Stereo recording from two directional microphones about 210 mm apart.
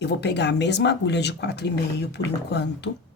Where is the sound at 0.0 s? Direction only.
55° left (ahead or behind).